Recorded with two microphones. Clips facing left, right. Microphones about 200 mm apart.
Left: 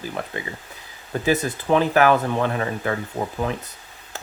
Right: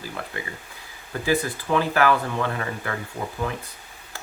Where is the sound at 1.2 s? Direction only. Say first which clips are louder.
Left 2 dB; 20° left (ahead or behind).